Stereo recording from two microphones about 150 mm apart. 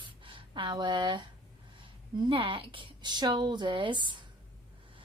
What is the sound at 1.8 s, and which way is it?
Speech, 35° right (ahead or behind).